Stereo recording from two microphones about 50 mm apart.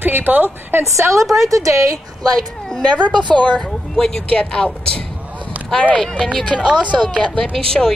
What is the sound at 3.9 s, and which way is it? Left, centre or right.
Speech, centre.